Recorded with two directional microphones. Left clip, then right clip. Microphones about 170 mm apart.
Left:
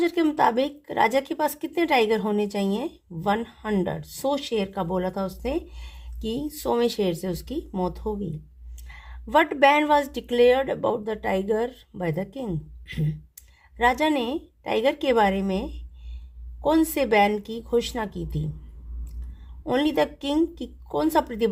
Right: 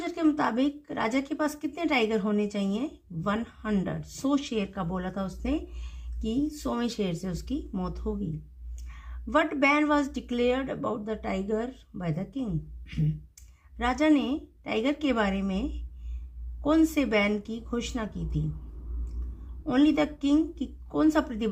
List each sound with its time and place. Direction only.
0.0 s speech: 60° left (ahead or behind)
13.7 s speech: 55° left (ahead or behind)
16.6 s speech: 60° left (ahead or behind)
19.6 s speech: 60° left (ahead or behind)